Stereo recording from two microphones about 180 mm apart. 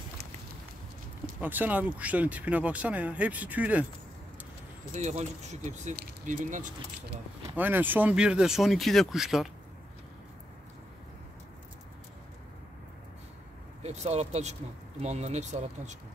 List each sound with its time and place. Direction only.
1.4 s speech: 10° right (ahead or behind)
4.9 s speech: 40° right (ahead or behind)
7.5 s speech: 10° right (ahead or behind)
13.8 s speech: 40° right (ahead or behind)